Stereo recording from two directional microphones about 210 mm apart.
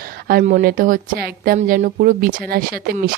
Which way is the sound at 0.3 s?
45° right (ahead or behind).